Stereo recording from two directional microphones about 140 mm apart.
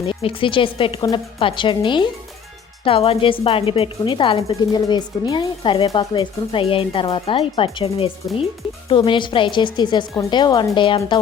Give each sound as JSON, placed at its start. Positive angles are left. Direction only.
{"t": 0.1, "sound": "a woman's voice", "side_deg": 40}